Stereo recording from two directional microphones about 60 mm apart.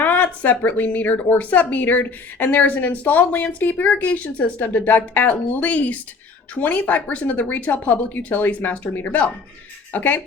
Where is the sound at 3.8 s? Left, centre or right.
Left.